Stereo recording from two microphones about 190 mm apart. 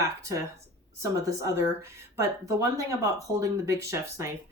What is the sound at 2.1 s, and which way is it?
Speech, 15° right (ahead or behind).